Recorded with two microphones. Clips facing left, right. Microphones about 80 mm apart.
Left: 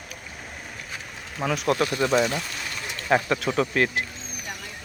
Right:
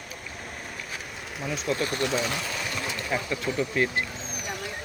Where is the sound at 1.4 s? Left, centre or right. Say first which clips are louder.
Left 5 dB; left.